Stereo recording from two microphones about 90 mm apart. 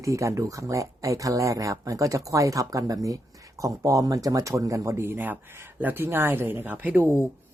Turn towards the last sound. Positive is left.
turn(degrees=-20)  # may be behind; listen again after turning